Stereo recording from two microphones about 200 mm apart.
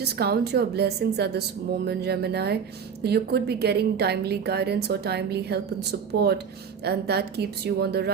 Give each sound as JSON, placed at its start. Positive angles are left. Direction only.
{"t": 0.0, "sound": "a woman's voice", "side_deg": -50}